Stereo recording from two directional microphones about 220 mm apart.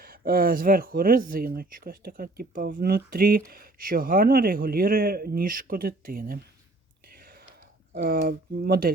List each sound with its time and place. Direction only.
0.0 s speech: 40° right (ahead or behind)
7.9 s speech: 50° right (ahead or behind)